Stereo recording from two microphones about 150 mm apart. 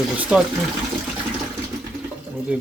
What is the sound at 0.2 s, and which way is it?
Speech, 5° right (ahead or behind).